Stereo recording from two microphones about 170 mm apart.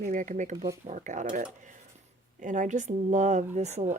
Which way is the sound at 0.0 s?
50° right (ahead or behind).